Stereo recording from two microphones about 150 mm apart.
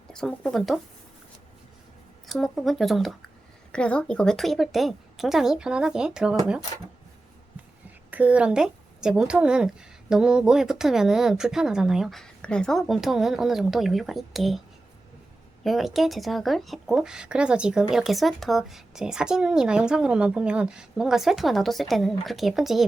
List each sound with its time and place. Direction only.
0.1 s speech: 5° left (ahead or behind)
2.2 s speech: centre (ahead or behind)
8.1 s speech: 10° right (ahead or behind)
15.6 s speech: centre (ahead or behind)